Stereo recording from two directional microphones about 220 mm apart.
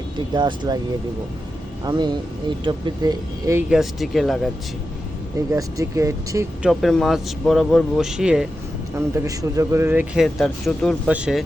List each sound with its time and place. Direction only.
0.3 s speech: 20° right (ahead or behind)
1.8 s speech: 20° right (ahead or behind)
3.7 s speech: centre (ahead or behind)
5.5 s speech: 15° right (ahead or behind)
6.7 s speech: centre (ahead or behind)
9.0 s speech: 15° right (ahead or behind)